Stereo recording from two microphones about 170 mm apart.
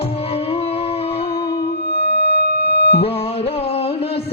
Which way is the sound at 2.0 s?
70° left (ahead or behind).